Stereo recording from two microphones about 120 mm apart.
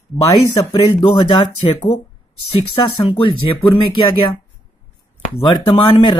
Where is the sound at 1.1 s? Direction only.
45° left (ahead or behind).